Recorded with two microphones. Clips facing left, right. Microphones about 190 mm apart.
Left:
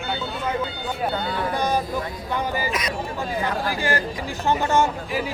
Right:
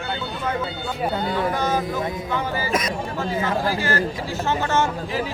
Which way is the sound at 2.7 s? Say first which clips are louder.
Right 3 dB; 45° right (ahead or behind).